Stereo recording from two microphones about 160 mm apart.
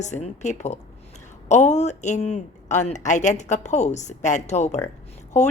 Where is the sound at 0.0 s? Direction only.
45° left (ahead or behind).